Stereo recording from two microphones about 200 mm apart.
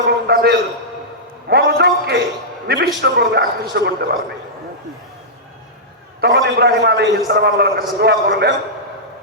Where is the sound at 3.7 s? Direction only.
50° right (ahead or behind).